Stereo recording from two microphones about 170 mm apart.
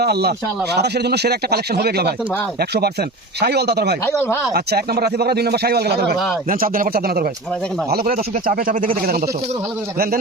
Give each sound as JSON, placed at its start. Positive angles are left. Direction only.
{"t": 0.0, "sound": "speech", "side_deg": -70}
{"t": 4.0, "sound": "speech", "side_deg": 15}
{"t": 4.5, "sound": "speech", "side_deg": -70}
{"t": 6.5, "sound": "speech", "side_deg": -55}
{"t": 8.1, "sound": "speech", "side_deg": -55}